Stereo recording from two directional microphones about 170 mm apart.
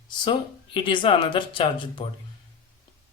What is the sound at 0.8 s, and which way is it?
Speech, 30° left (ahead or behind).